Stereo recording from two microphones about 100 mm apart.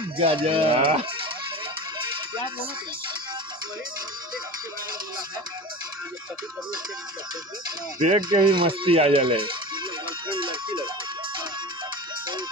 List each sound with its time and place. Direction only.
0.2 s speech: 65° right (ahead or behind); by 1.0 s 80° right
8.2 s speech: 50° right (ahead or behind)